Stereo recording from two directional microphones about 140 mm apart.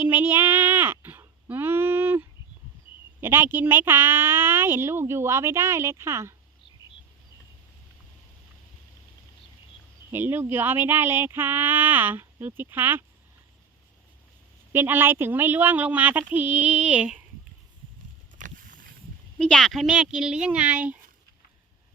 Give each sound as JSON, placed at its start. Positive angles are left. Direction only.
{"t": 0.0, "sound": "a sound", "side_deg": -15}
{"t": 3.2, "sound": "speech", "side_deg": -15}
{"t": 10.1, "sound": "speech", "side_deg": -15}
{"t": 14.7, "sound": "speech", "side_deg": -15}
{"t": 18.3, "sound": "boat", "side_deg": -70}
{"t": 19.4, "sound": "speech", "side_deg": 5}